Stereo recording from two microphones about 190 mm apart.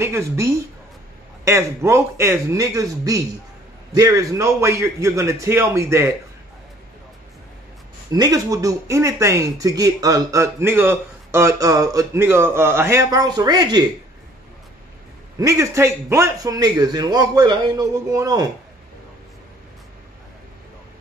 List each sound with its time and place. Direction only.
0.0 s speech: 15° right (ahead or behind)
8.1 s speech: 20° right (ahead or behind)
15.3 s a man's voice: 15° right (ahead or behind)